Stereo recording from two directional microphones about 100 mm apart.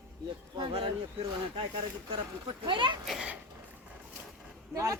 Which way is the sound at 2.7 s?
55° right (ahead or behind).